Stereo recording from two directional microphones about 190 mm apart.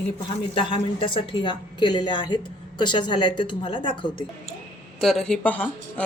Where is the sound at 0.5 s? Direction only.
30° left (ahead or behind).